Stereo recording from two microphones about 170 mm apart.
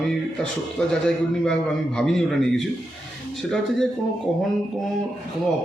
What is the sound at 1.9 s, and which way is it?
Speech, 5° left (ahead or behind).